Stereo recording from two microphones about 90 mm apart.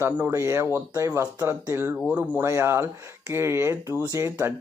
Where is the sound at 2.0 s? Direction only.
15° right (ahead or behind).